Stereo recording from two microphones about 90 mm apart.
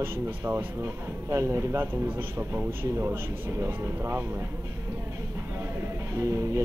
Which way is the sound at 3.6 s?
30° right (ahead or behind).